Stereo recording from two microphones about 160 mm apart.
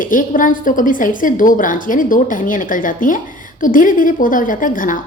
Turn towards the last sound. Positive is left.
turn(degrees=55)  # may be behind; listen again after turning